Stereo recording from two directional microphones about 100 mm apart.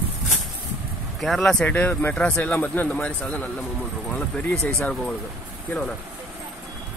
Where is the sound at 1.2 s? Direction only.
Centre (ahead or behind).